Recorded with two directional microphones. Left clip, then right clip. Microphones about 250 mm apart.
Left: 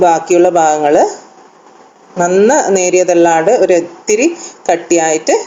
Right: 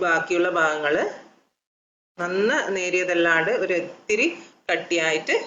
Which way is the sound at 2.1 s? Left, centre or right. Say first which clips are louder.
Left 13 dB; centre.